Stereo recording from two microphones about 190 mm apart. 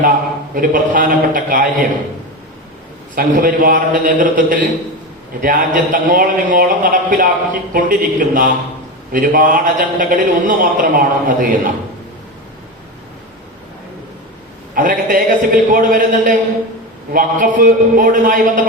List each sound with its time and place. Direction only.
0.5 s a man's voice: 45° right (ahead or behind)
3.2 s a man's voice: 45° right (ahead or behind)
14.8 s a man's voice: 45° right (ahead or behind)